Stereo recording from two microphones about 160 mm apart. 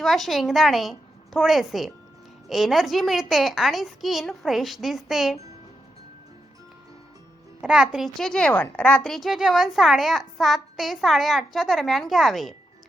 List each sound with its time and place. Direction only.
0.0 s a woman's voice: centre (ahead or behind)
7.6 s a child's voice: 5° right (ahead or behind)